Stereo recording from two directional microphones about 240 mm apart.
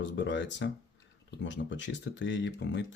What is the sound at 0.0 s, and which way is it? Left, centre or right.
Speech, left.